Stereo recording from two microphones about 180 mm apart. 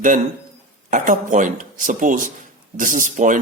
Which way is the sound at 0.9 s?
45° right (ahead or behind).